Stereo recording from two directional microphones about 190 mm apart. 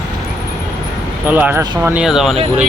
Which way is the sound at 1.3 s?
10° right (ahead or behind).